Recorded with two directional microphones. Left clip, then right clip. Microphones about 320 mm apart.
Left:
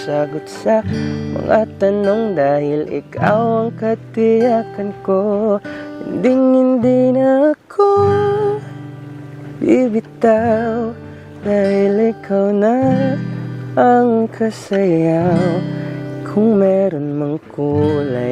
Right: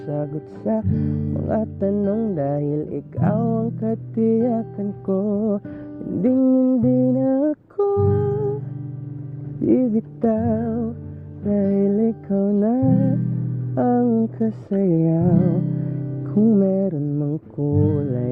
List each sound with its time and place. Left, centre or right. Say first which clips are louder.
0.0 s music: left 9 dB; centre
9.6 s music: left 6 dB; centre